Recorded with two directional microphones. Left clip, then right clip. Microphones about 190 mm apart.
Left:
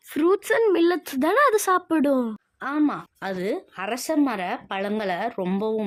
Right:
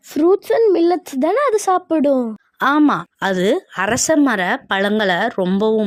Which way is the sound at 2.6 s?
50° right (ahead or behind).